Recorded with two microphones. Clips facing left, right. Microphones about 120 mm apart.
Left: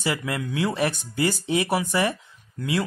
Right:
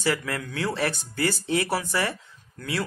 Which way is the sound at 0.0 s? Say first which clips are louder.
Even; 20° left (ahead or behind).